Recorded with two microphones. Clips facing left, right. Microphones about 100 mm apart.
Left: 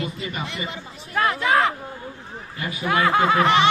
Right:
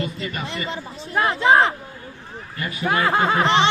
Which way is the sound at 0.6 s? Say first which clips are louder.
Right 4 dB; 30° right (ahead or behind).